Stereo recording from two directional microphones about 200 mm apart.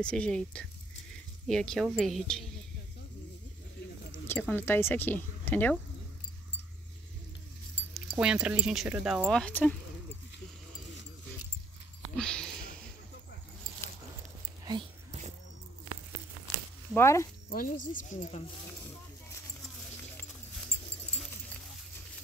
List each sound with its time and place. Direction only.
0.0 s speech: 5° left (ahead or behind)
4.1 s speech: 10° left (ahead or behind)
7.9 s speech: centre (ahead or behind)
12.2 s a sound: 5° left (ahead or behind)
14.6 s dog: 20° right (ahead or behind)
16.9 s speech: 15° left (ahead or behind)
17.5 s speech: 45° left (ahead or behind)